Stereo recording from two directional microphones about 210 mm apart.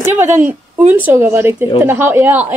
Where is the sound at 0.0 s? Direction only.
10° right (ahead or behind).